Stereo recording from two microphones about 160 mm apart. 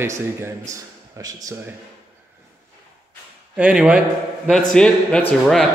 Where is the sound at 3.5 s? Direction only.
5° right (ahead or behind).